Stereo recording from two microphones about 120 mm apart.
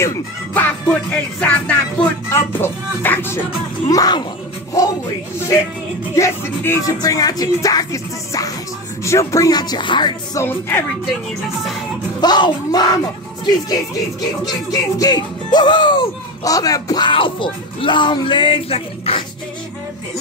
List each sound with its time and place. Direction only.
0.6 s music: 10° left (ahead or behind)
3.9 s speech: 30° left (ahead or behind)
6.1 s music: 25° left (ahead or behind)
9.0 s speech: 25° left (ahead or behind); by 10.1 s 40° left (ahead or behind)
10.3 s music: 20° left (ahead or behind)
12.2 s speech: 35° left (ahead or behind)